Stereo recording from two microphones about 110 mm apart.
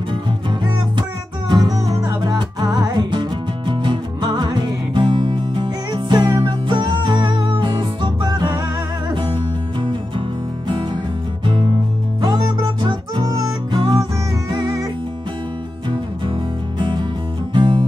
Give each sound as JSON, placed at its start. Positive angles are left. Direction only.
{"t": 1.5, "sound": "music", "side_deg": -35}
{"t": 12.8, "sound": "music", "side_deg": -45}
{"t": 16.7, "sound": "music", "side_deg": -45}